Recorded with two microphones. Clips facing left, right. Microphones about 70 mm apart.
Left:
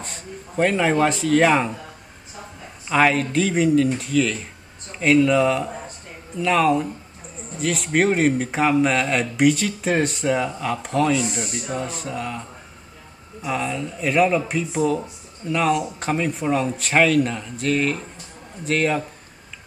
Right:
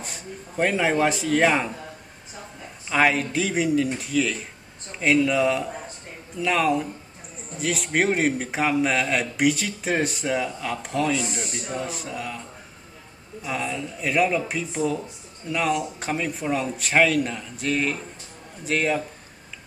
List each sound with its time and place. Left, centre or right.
0.0 s speech: centre
2.9 s speech: centre
11.3 s speech: centre
11.8 s speech: centre
13.4 s speech: centre